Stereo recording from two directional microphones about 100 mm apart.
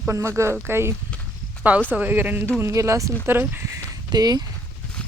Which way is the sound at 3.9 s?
40° right (ahead or behind).